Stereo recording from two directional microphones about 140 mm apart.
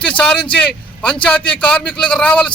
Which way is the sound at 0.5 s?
10° left (ahead or behind).